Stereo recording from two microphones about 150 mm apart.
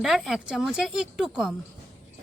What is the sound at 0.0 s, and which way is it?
Speech, centre (ahead or behind).